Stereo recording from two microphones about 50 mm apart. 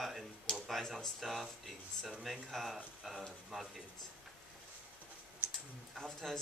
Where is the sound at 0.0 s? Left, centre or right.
Centre.